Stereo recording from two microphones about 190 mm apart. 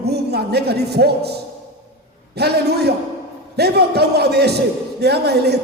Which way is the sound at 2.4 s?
60° right (ahead or behind).